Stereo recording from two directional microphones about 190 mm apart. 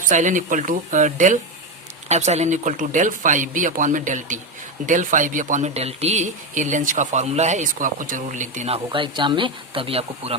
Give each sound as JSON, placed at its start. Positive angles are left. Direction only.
{"t": 0.0, "sound": "speech", "side_deg": -40}